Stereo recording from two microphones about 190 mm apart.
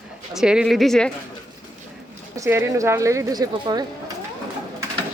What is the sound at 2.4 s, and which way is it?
A woman's voice, 15° right (ahead or behind).